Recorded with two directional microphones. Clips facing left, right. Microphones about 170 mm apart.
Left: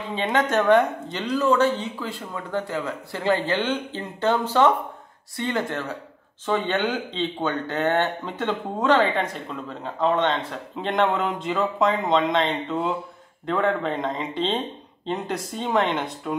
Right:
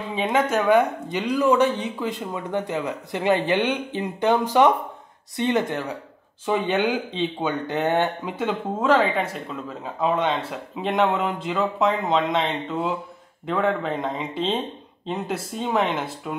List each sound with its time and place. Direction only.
0.1 s speech: 10° right (ahead or behind)